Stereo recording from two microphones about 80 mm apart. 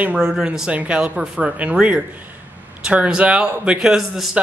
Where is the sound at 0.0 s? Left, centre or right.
Centre.